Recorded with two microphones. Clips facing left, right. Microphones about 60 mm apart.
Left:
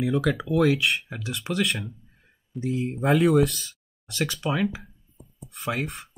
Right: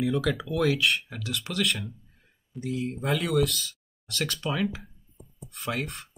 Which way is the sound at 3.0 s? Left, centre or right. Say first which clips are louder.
Left 7 dB; centre.